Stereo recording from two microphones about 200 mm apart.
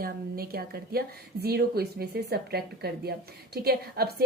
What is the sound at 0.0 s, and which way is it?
A woman's voice, 50° right (ahead or behind).